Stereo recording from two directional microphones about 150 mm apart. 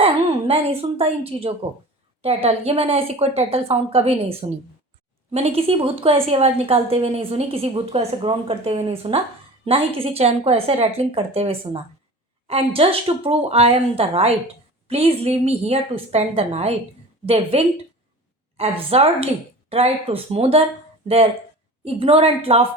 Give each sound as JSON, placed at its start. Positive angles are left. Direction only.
{"t": 0.0, "sound": "a woman's voice", "side_deg": -40}
{"t": 21.8, "sound": "a woman's voice", "side_deg": -40}